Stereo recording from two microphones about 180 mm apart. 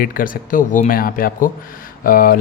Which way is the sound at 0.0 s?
50° left (ahead or behind).